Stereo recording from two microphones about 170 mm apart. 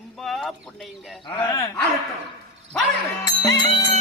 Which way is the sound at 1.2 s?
30° left (ahead or behind).